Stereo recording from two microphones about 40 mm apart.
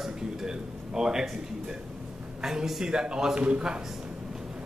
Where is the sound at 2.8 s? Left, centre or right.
Centre.